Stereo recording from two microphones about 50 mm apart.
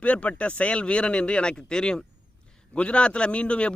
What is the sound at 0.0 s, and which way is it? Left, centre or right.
A man's voice, left.